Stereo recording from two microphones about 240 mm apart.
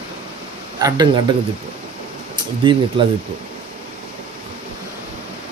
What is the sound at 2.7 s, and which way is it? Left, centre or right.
Speech, centre.